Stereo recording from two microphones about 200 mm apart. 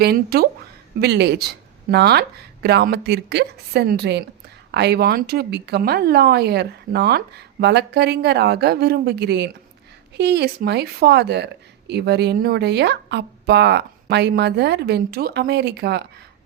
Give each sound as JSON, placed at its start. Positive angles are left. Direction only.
{"t": 0.0, "sound": "a woman's voice", "side_deg": -50}